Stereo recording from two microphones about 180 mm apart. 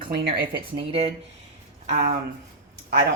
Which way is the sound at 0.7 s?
30° right (ahead or behind).